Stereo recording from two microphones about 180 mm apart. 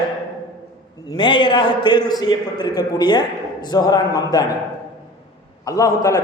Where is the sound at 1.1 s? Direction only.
25° left (ahead or behind).